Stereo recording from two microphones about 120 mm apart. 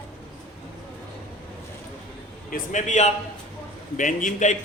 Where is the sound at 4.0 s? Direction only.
90° left.